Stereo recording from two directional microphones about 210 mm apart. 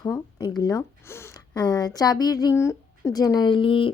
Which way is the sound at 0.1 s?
20° left (ahead or behind).